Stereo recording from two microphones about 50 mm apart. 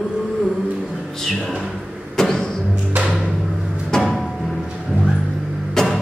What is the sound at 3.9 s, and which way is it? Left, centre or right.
Music, centre.